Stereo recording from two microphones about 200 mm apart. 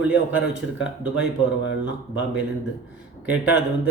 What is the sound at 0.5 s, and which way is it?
Speech, 60° left (ahead or behind).